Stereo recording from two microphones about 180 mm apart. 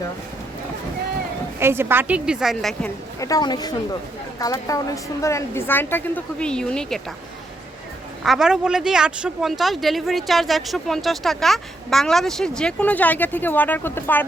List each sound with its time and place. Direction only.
1.5 s a woman's voice: 15° right (ahead or behind)
3.2 s a woman's voice: 20° left (ahead or behind)
8.2 s speech: centre (ahead or behind)